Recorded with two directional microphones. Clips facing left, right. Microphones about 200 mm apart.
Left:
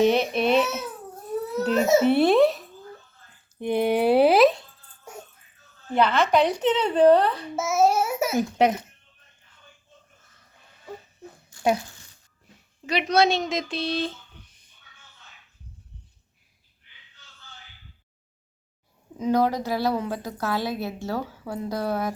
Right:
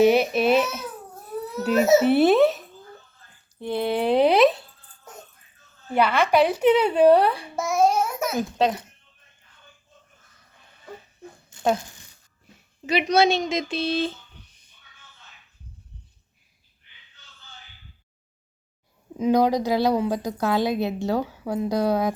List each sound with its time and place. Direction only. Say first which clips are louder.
0.0 s speech: right 3 dB; 5° right (ahead or behind)
3.6 s a sound: left 2 dB; 15° left (ahead or behind)
5.1 s music: left 3 dB; 10° left (ahead or behind)
5.9 s a woman's voice: even; 10° right (ahead or behind)
7.5 s babbling: left 1 dB; 5° left (ahead or behind)
8.5 s speech: left 2 dB; 20° left (ahead or behind)
11.5 s a sound: even; 20° right (ahead or behind)
12.8 s speech: right 2 dB; 5° right (ahead or behind)
19.2 s a woman's voice: right 3 dB; 15° right (ahead or behind)